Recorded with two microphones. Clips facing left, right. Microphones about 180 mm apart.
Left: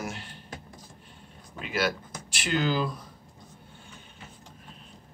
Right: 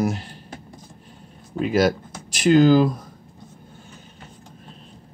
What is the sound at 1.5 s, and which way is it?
Speech, 40° right (ahead or behind).